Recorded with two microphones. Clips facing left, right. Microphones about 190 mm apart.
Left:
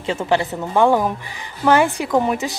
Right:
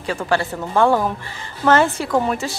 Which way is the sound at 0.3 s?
20° left (ahead or behind).